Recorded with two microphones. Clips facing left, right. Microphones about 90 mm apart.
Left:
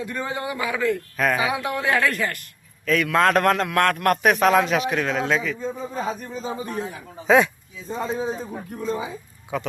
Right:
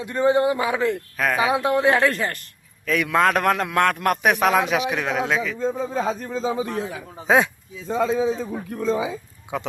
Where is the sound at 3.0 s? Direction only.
10° right (ahead or behind).